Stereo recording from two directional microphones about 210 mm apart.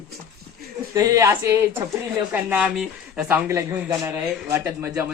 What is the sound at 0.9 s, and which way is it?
Speech, 15° right (ahead or behind).